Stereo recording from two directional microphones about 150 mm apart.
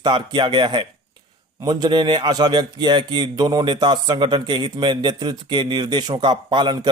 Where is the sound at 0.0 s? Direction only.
30° right (ahead or behind).